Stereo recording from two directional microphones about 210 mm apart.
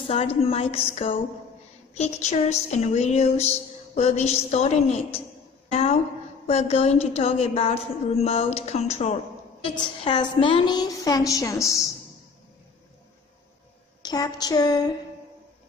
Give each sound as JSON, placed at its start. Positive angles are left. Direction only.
{"t": 0.0, "sound": "a woman's voice", "side_deg": 30}
{"t": 2.0, "sound": "a sound", "side_deg": 30}
{"t": 5.7, "sound": "a woman's voice", "side_deg": 30}
{"t": 6.4, "sound": "a sound", "side_deg": 30}
{"t": 9.8, "sound": "a woman's voice", "side_deg": 25}
{"t": 14.0, "sound": "a woman's voice", "side_deg": 20}